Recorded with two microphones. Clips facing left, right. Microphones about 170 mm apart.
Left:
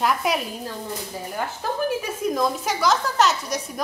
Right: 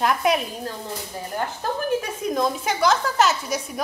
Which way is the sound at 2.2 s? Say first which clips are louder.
Even; centre (ahead or behind).